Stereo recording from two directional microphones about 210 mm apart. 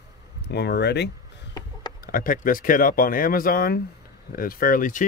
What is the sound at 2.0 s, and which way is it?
Speech, 40° left (ahead or behind).